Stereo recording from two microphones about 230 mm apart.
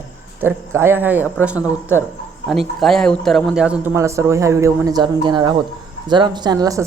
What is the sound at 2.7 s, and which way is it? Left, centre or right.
A woman's voice, centre.